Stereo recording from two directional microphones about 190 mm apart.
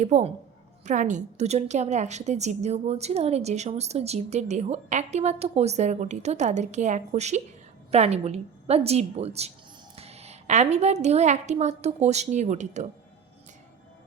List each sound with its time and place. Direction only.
0.0 s a woman's voice: 35° right (ahead or behind)